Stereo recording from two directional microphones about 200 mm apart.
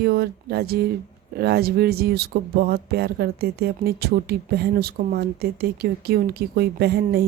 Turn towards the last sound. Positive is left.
turn(degrees=-55)  # may be behind; listen again after turning